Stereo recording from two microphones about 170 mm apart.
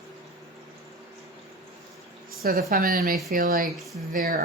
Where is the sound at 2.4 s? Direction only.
60° right (ahead or behind).